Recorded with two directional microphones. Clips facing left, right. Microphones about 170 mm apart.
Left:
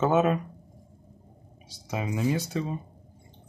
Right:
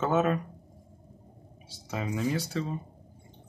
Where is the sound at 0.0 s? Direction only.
15° left (ahead or behind).